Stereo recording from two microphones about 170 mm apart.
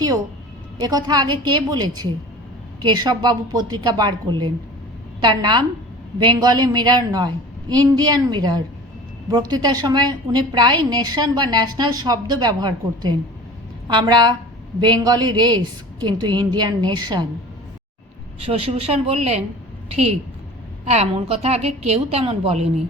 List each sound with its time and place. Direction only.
0.8 s a woman's voice: 25° right (ahead or behind)
18.7 s a woman's voice: 40° right (ahead or behind)
20.9 s a woman's voice: 35° right (ahead or behind)